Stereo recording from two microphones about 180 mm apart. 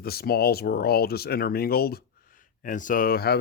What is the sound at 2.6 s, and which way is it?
Speech, 45° left (ahead or behind).